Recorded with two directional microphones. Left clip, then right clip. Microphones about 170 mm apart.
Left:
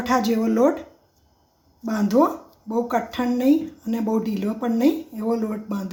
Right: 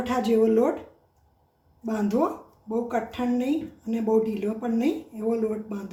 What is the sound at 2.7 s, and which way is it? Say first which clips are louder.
Speech: left 4 dB; 50° left (ahead or behind).